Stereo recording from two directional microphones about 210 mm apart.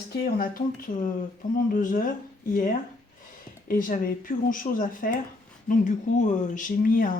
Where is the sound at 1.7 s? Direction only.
40° left (ahead or behind).